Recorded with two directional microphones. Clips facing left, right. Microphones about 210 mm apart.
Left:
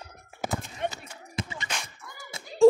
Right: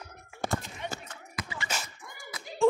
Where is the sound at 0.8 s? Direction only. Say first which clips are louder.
Left 6 dB; 55° left (ahead or behind).